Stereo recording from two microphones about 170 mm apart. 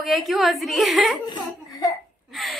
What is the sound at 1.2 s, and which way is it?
Speech, 25° left (ahead or behind).